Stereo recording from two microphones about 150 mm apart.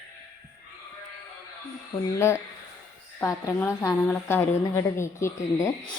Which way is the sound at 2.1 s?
20° left (ahead or behind).